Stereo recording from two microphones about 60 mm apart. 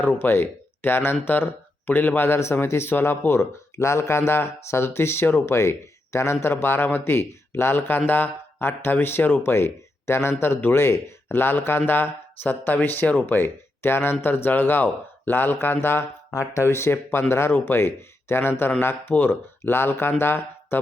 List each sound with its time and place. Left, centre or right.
0.0 s speech: left
16.3 s speech: left